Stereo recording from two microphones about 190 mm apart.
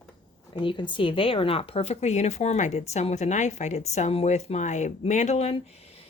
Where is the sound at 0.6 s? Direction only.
25° left (ahead or behind).